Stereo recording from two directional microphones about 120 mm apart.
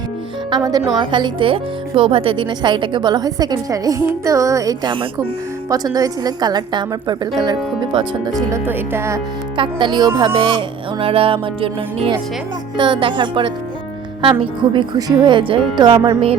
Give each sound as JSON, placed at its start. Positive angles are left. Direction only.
{"t": 0.5, "sound": "speech", "side_deg": -30}
{"t": 5.7, "sound": "speech", "side_deg": -30}
{"t": 8.4, "sound": "speech", "side_deg": -25}
{"t": 9.6, "sound": "speech", "side_deg": -40}
{"t": 10.2, "sound": "music", "side_deg": -40}
{"t": 14.2, "sound": "speech", "side_deg": -40}